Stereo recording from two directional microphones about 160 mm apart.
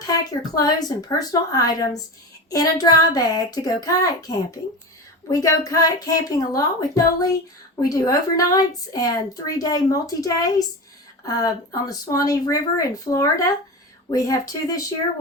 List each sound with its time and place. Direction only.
0.0 s a woman's voice: 25° left (ahead or behind)
5.3 s a woman's voice: 20° left (ahead or behind)